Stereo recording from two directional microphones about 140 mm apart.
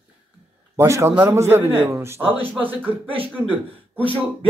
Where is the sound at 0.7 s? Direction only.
20° right (ahead or behind).